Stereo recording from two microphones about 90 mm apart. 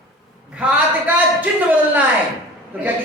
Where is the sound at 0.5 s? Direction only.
15° right (ahead or behind).